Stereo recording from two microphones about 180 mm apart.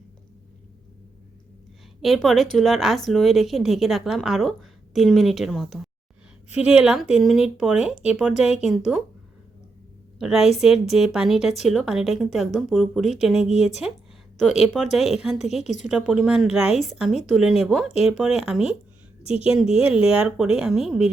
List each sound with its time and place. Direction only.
2.0 s a woman's voice: centre (ahead or behind)
10.2 s a woman's voice: 5° right (ahead or behind)
15.6 s a woman's voice: 40° left (ahead or behind)
15.9 s a woman's voice: 5° right (ahead or behind)
19.2 s a woman's voice: 35° left (ahead or behind)
20.1 s a woman's voice: 5° right (ahead or behind)